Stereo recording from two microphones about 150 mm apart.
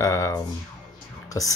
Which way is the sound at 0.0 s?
20° left (ahead or behind).